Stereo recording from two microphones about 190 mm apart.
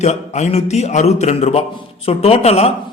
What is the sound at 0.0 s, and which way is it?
A man's voice, 35° left (ahead or behind).